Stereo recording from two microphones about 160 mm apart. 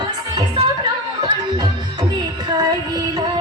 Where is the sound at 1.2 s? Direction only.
25° right (ahead or behind).